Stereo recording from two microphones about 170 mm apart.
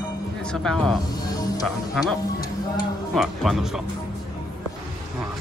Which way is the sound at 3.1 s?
Centre (ahead or behind).